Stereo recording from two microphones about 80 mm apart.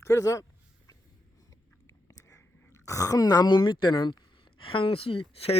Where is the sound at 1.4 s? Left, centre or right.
Left.